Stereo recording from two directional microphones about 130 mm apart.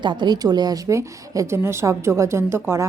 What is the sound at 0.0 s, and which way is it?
A woman's voice, 35° right (ahead or behind).